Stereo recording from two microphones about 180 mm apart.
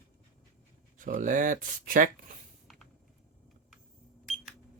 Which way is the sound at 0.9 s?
45° right (ahead or behind).